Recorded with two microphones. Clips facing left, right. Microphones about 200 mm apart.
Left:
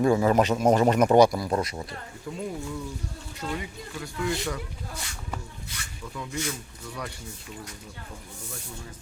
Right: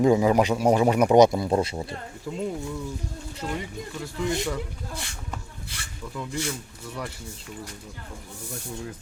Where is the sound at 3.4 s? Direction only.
10° right (ahead or behind).